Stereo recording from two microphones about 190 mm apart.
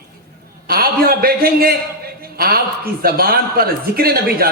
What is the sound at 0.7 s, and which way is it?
A man's voice, 55° right (ahead or behind).